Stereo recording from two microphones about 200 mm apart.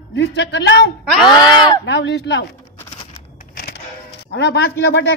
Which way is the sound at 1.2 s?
20° left (ahead or behind).